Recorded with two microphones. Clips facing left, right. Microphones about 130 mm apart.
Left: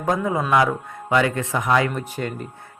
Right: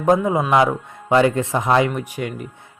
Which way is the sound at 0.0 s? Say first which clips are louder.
Right 5 dB; 20° right (ahead or behind).